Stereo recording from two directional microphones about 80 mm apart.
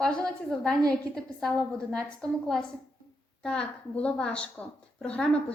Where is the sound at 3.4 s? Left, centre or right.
Centre.